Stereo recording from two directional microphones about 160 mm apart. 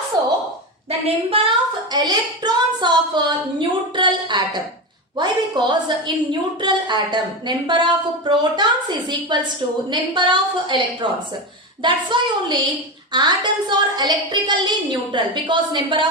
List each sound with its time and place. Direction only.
0.9 s a woman's voice: 40° right (ahead or behind)